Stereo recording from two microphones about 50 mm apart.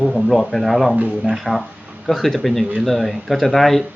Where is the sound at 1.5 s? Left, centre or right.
Centre.